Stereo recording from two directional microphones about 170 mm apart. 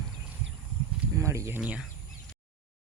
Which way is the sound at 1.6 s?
5° right (ahead or behind).